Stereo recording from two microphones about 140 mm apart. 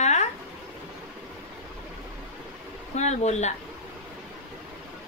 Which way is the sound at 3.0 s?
55° left (ahead or behind).